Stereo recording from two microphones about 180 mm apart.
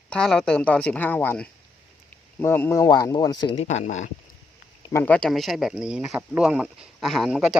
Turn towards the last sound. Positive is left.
turn(degrees=0)  # may be behind; listen again after turning